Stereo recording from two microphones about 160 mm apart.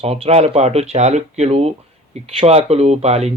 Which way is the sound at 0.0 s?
40° right (ahead or behind).